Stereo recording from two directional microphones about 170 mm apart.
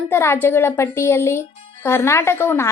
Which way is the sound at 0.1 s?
15° left (ahead or behind).